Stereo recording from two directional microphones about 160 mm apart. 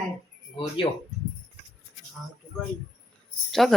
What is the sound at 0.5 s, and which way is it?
Speech, 30° left (ahead or behind).